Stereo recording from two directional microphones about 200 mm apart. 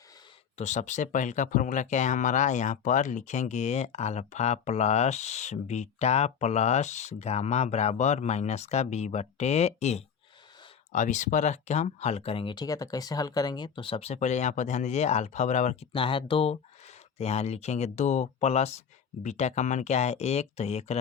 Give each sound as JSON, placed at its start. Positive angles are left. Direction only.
{"t": 0.5, "sound": "speech", "side_deg": 35}
{"t": 15.9, "sound": "speech", "side_deg": 25}